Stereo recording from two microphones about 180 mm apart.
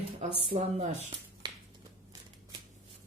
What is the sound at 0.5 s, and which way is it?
Speech, 45° right (ahead or behind).